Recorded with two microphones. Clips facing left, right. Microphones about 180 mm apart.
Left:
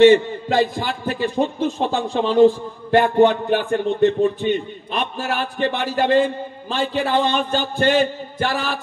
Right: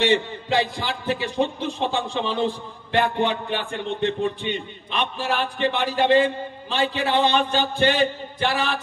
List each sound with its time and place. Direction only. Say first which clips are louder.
0.0 s a man's voice: left 9 dB; 50° left (ahead or behind)